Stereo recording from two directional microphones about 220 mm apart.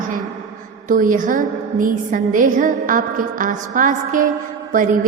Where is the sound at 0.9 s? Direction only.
35° right (ahead or behind).